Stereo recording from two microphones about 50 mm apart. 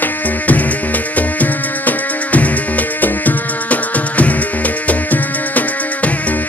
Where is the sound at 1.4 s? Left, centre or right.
Left.